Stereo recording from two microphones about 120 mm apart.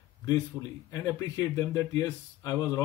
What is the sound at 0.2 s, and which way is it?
Speech, 30° left (ahead or behind).